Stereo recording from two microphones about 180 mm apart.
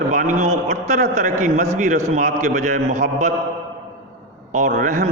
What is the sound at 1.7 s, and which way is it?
Speech, 45° right (ahead or behind).